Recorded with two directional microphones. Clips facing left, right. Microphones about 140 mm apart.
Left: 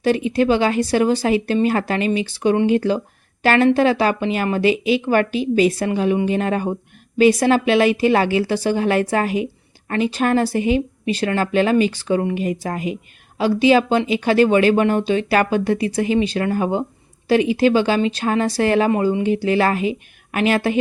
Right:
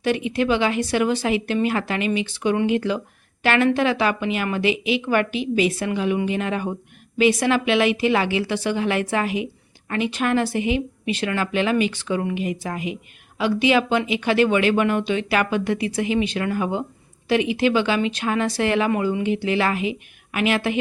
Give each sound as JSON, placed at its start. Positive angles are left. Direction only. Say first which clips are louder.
{"t": 0.0, "sound": "speech", "louder": "left 4 dB", "side_deg": 35}